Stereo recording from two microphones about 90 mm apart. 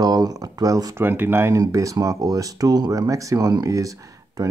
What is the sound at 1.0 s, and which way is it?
Speech, 25° right (ahead or behind).